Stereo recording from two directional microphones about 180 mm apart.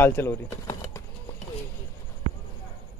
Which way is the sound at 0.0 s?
10° left (ahead or behind).